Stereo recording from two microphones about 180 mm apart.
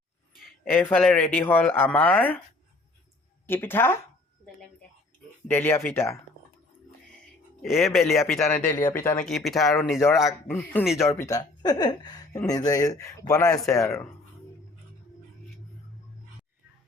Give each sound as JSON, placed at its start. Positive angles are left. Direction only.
{"t": 0.3, "sound": "a sound", "side_deg": 55}
{"t": 0.7, "sound": "speech", "side_deg": 10}
{"t": 3.4, "sound": "speech", "side_deg": 10}
{"t": 5.5, "sound": "speech", "side_deg": 10}
{"t": 7.6, "sound": "speech", "side_deg": 0}
{"t": 8.4, "sound": "speech", "side_deg": 15}
{"t": 9.2, "sound": "speech", "side_deg": 0}
{"t": 10.5, "sound": "a man's voice", "side_deg": 10}